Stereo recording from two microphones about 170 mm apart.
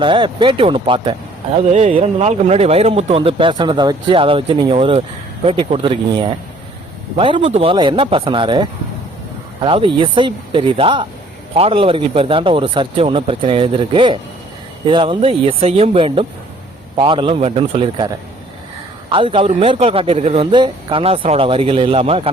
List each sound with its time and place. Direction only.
0.0 s speech: 30° right (ahead or behind)
1.5 s speech: 40° right (ahead or behind)
19.1 s speech: 30° right (ahead or behind)